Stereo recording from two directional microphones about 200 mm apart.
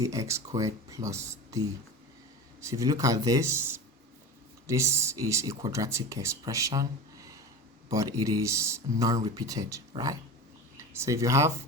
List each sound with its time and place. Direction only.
0.0 s speech: 15° right (ahead or behind)